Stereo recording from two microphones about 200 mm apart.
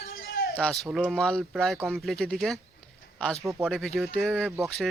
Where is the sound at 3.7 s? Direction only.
Centre (ahead or behind).